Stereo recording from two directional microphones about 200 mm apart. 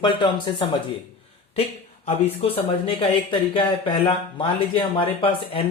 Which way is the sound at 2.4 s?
30° left (ahead or behind).